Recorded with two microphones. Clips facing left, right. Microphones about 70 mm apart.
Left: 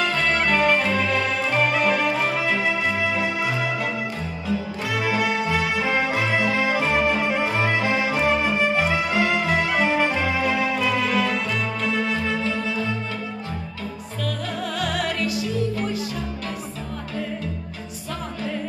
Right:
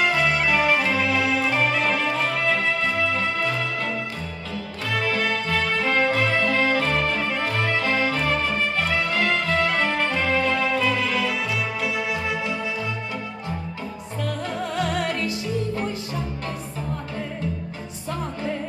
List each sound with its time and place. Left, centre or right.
0.0 s music: centre
14.8 s music: right